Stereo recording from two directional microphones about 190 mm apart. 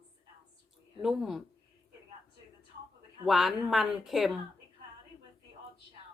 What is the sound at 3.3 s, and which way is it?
Speech, centre (ahead or behind).